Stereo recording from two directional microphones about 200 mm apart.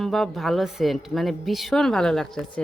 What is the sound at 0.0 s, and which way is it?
A woman's voice, centre (ahead or behind).